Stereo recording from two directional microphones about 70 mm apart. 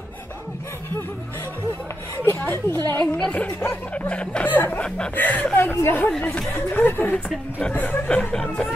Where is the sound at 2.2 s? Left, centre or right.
Left.